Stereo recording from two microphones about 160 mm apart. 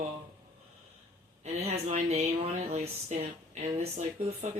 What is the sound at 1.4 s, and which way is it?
Speech, 45° right (ahead or behind).